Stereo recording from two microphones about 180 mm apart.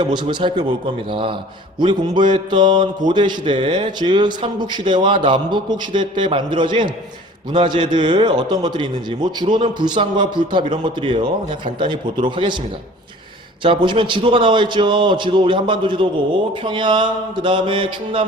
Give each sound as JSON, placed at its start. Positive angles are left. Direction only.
{"t": 0.0, "sound": "a man's voice", "side_deg": -25}
{"t": 13.6, "sound": "a man's voice", "side_deg": -25}